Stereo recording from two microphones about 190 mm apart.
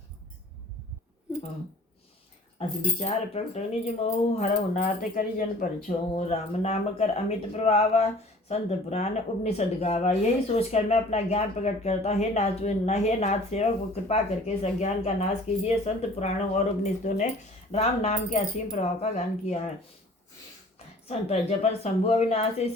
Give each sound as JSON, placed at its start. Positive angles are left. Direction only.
{"t": 2.6, "sound": "speech", "side_deg": 35}
{"t": 21.1, "sound": "speech", "side_deg": 35}